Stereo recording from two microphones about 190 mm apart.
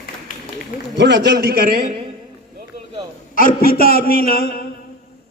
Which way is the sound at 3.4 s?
50° left (ahead or behind).